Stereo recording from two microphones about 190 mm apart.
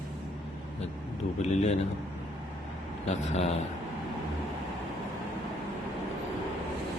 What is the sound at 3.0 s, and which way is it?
Speech, 35° left (ahead or behind).